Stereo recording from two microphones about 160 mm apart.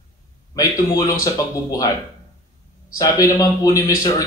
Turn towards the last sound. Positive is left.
turn(degrees=20)  # may be behind; listen again after turning